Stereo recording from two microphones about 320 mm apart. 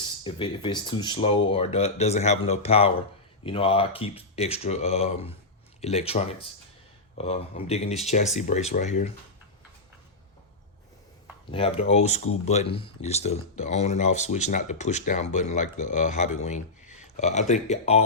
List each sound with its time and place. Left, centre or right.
0.3 s speech: centre
11.5 s speech: centre